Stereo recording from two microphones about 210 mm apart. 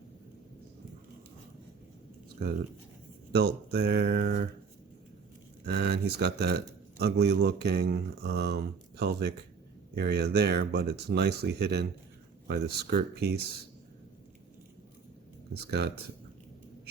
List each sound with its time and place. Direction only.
3.3 s speech: 50° right (ahead or behind)
5.6 s speech: 50° right (ahead or behind)
15.6 s speech: 50° right (ahead or behind)